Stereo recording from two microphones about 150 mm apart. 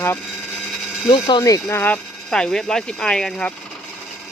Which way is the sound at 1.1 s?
30° left (ahead or behind).